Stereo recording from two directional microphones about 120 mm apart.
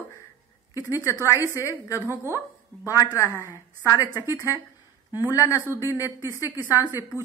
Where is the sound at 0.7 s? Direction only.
25° left (ahead or behind).